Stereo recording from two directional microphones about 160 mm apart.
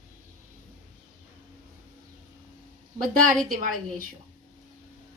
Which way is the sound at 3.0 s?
60° right (ahead or behind).